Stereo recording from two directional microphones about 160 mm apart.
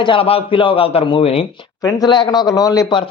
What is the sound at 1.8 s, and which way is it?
Speech, 25° left (ahead or behind).